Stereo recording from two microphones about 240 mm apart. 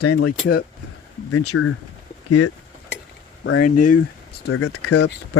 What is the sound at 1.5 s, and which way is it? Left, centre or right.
Speech, left.